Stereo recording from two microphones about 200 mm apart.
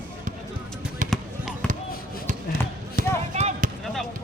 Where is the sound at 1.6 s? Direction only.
5° left (ahead or behind).